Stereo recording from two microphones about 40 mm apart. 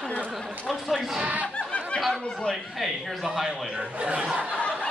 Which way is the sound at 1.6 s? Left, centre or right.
Left.